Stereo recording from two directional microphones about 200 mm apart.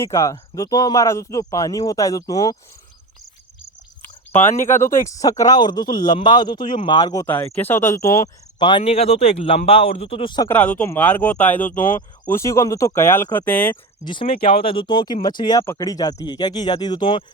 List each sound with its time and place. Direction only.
0.0 s speech: 15° left (ahead or behind)
4.8 s speech: 15° left (ahead or behind)
10.5 s speech: 5° left (ahead or behind)
14.0 s speech: 25° left (ahead or behind)